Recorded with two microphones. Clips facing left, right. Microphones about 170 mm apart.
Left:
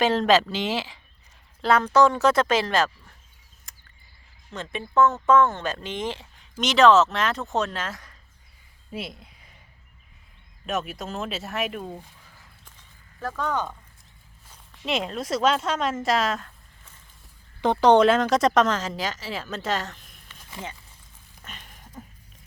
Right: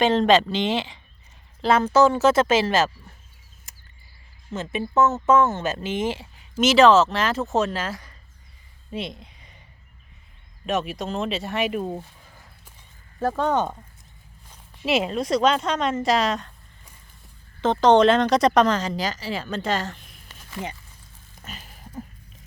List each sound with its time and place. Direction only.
0.0 s speech: 5° left (ahead or behind)
3.7 s cricket: 5° right (ahead or behind)
4.5 s speech: 5° right (ahead or behind)
8.9 s a sound: 5° left (ahead or behind)
10.7 s speech: centre (ahead or behind)
13.1 s speech: 30° right (ahead or behind)
14.5 s speech: 5° right (ahead or behind)
17.6 s speech: 10° left (ahead or behind)
21.4 s a sound: 5° right (ahead or behind)